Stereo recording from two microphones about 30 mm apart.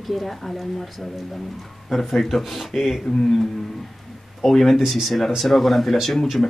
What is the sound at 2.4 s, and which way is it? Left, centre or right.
Speech, centre.